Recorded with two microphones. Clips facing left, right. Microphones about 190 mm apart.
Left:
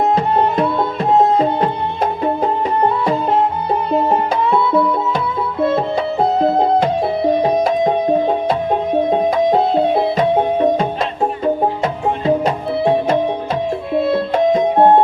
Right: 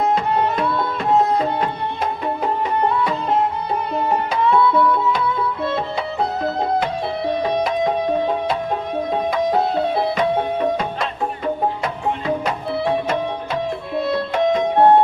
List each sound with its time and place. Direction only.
0.1 s music: 35° left (ahead or behind)
3.7 s music: 30° left (ahead or behind)
5.7 s music: 30° left (ahead or behind)
9.0 s music: 25° left (ahead or behind)
14.3 s music: 25° left (ahead or behind)